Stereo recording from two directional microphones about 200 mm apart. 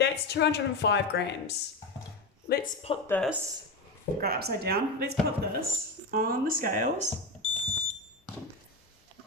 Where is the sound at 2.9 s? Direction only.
30° left (ahead or behind).